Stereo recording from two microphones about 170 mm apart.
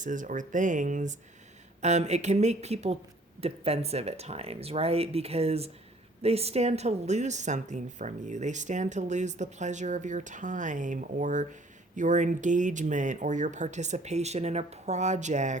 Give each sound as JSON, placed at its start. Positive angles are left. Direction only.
{"t": 0.0, "sound": "speech", "side_deg": -50}